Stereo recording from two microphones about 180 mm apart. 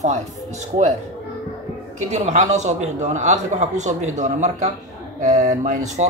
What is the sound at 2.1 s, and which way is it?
Speech, 40° right (ahead or behind).